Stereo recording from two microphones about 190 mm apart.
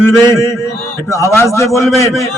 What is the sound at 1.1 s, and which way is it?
Speech, 15° left (ahead or behind).